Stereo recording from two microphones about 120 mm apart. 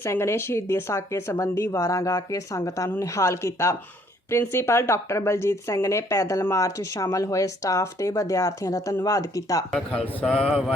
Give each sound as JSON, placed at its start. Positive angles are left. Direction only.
{"t": 0.0, "sound": "speech", "side_deg": 20}
{"t": 9.7, "sound": "speech", "side_deg": 5}